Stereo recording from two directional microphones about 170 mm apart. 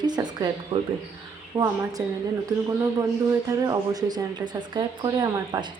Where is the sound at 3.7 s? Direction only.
25° right (ahead or behind).